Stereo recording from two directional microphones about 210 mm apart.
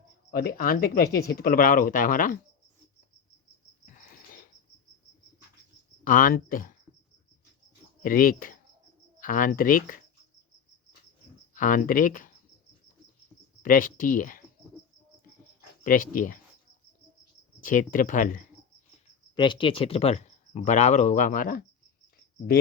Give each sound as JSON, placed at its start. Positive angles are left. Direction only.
{"t": 0.3, "sound": "speech", "side_deg": 45}
{"t": 3.8, "sound": "a sound", "side_deg": 40}
{"t": 6.1, "sound": "speech", "side_deg": 40}
{"t": 8.0, "sound": "speech", "side_deg": 40}
{"t": 11.5, "sound": "speech", "side_deg": 40}
{"t": 13.6, "sound": "speech", "side_deg": 40}
{"t": 15.8, "sound": "speech", "side_deg": 40}
{"t": 17.6, "sound": "speech", "side_deg": 40}
{"t": 19.4, "sound": "speech", "side_deg": 20}